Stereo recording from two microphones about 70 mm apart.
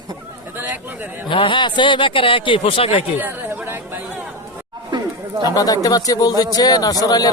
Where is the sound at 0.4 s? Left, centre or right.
Right.